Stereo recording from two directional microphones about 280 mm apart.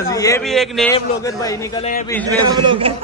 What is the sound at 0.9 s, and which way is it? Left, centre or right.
Speech, centre.